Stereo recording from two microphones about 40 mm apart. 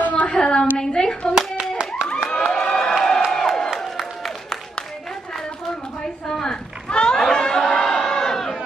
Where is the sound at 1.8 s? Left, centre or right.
Right.